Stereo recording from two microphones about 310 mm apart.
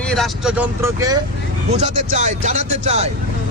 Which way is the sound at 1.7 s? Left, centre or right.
Right.